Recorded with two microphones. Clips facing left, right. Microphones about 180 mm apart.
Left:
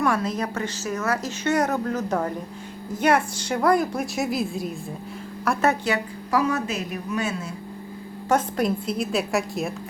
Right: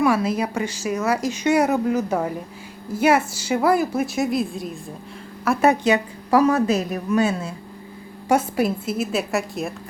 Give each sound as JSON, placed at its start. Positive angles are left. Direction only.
{"t": 0.0, "sound": "a woman's voice", "side_deg": -10}
{"t": 5.6, "sound": "speech", "side_deg": -20}
{"t": 6.3, "sound": "a woman's voice", "side_deg": -35}
{"t": 8.3, "sound": "a woman's voice", "side_deg": -5}